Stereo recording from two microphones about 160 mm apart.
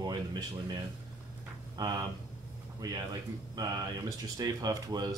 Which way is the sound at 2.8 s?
25° right (ahead or behind).